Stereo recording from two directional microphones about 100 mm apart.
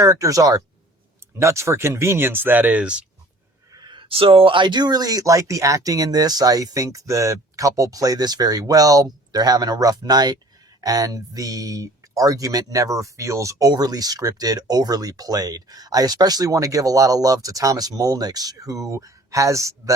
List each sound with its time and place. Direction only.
0.0 s speech: 35° right (ahead or behind); by 3.0 s 15° right (ahead or behind)
3.8 s a sound: 50° right (ahead or behind)
4.1 s speech: 65° right (ahead or behind); by 19.9 s 30° right (ahead or behind)